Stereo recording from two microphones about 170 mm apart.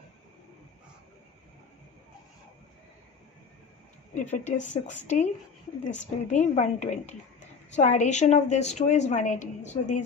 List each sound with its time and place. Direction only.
4.1 s a woman's voice: 45° left (ahead or behind)